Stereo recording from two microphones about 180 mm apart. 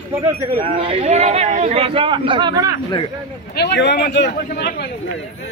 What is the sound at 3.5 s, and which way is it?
Speech, 70° left (ahead or behind).